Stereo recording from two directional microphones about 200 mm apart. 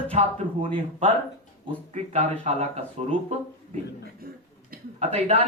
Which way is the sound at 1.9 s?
35° right (ahead or behind).